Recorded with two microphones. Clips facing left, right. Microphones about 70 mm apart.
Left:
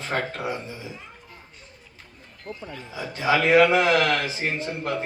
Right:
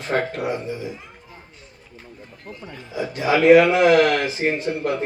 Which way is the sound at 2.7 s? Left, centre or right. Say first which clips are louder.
Right 8 dB; centre.